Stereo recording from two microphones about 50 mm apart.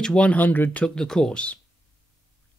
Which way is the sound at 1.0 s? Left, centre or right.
Centre.